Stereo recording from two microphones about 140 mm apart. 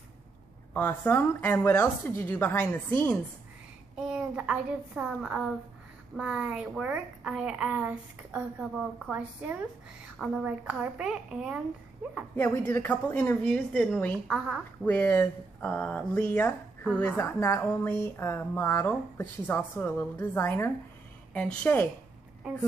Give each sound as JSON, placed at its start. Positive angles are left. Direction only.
{"t": 0.7, "sound": "speech", "side_deg": 10}
{"t": 3.9, "sound": "a child's voice", "side_deg": -5}
{"t": 12.4, "sound": "speech", "side_deg": 15}
{"t": 14.2, "sound": "a child's voice", "side_deg": -5}
{"t": 14.8, "sound": "speech", "side_deg": 15}